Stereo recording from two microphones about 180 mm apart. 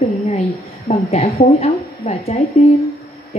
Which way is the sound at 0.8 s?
35° left (ahead or behind).